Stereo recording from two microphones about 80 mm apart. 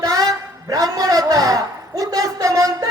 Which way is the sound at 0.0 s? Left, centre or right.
Right.